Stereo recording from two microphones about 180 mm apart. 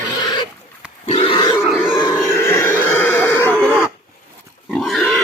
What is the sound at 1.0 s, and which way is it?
Pig, 30° left (ahead or behind).